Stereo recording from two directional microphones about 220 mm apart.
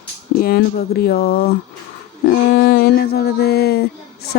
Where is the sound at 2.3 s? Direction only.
45° left (ahead or behind).